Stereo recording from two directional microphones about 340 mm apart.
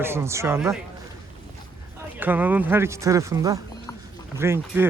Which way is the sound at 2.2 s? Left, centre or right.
Centre.